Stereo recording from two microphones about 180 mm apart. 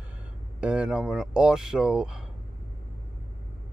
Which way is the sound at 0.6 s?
5° right (ahead or behind).